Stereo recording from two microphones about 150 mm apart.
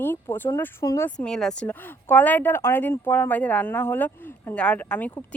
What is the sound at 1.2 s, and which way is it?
Speech, 5° left (ahead or behind).